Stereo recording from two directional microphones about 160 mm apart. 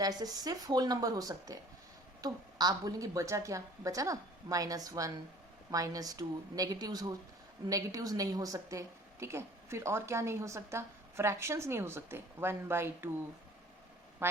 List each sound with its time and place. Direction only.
0.0 s a woman's voice: 25° right (ahead or behind)
14.2 s a woman's voice: 15° right (ahead or behind)